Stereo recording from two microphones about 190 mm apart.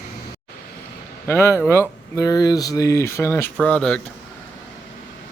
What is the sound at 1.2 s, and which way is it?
Speech, 15° left (ahead or behind).